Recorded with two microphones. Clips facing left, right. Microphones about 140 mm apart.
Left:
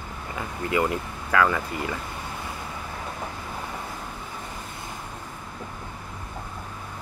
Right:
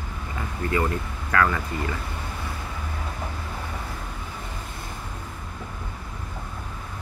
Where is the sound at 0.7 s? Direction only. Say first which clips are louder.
Left 2 dB; 15° left (ahead or behind).